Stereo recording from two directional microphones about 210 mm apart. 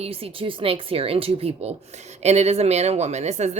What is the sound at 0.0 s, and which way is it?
A woman's voice, 25° right (ahead or behind).